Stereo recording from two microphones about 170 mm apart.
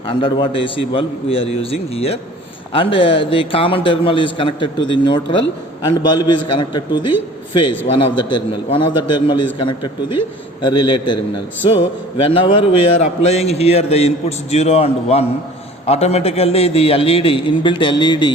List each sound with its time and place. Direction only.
0.1 s a man's voice: 30° left (ahead or behind)
12.2 s a man's voice: 30° left (ahead or behind)